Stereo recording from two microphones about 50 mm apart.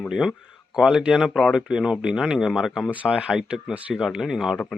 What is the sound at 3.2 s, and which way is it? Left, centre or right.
Speech, centre.